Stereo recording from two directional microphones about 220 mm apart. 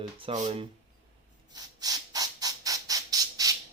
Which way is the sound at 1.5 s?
15° right (ahead or behind).